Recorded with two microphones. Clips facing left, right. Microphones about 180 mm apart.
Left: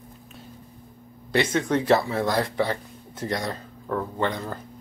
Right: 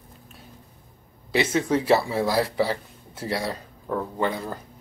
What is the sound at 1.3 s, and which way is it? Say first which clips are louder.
Speech: even; 5° right (ahead or behind).